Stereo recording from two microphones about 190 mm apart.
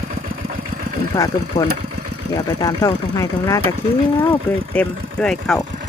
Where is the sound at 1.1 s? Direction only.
15° left (ahead or behind).